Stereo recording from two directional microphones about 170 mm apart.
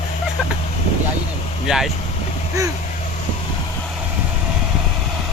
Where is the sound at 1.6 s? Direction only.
Centre (ahead or behind).